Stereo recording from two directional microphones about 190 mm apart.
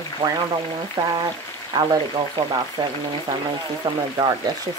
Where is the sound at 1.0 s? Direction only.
20° right (ahead or behind).